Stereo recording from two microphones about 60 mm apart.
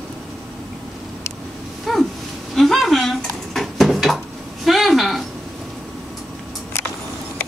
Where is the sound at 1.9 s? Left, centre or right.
Centre.